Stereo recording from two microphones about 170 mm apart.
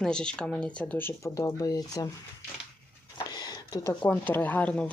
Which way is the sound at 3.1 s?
25° left (ahead or behind).